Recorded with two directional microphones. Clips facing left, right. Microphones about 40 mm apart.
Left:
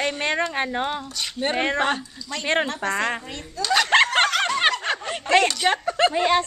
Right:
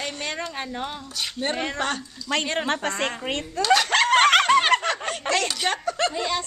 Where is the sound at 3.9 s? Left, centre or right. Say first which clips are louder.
Left 2 dB; left.